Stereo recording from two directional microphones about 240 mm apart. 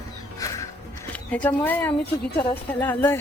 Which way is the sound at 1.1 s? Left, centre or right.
Centre.